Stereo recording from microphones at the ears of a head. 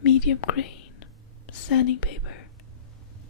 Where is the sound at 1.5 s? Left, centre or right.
Left.